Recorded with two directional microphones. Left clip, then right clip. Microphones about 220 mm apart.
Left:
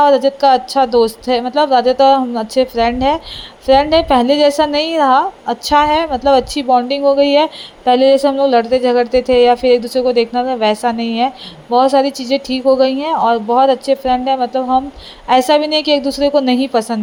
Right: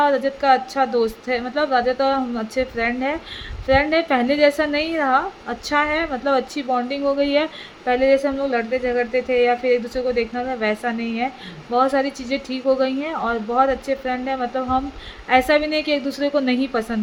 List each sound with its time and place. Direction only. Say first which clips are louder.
0.0 s a woman's voice: left 8 dB; 20° left (ahead or behind)